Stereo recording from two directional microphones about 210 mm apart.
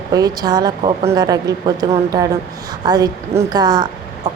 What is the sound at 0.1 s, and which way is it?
A woman's voice, 20° right (ahead or behind).